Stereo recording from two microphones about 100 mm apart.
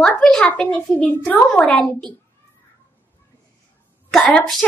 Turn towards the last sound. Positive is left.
turn(degrees=5)  # may be behind; listen again after turning